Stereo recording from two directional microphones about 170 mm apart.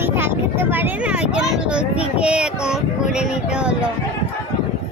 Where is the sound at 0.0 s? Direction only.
15° right (ahead or behind).